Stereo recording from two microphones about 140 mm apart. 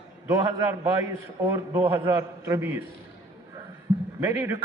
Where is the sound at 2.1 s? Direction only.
20° right (ahead or behind).